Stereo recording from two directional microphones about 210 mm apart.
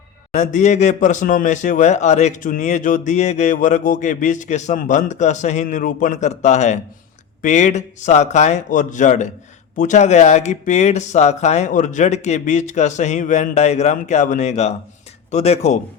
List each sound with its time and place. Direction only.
0.3 s speech: 35° left (ahead or behind)